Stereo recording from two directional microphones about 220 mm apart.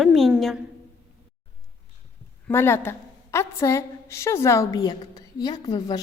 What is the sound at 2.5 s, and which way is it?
A woman's voice, 10° left (ahead or behind).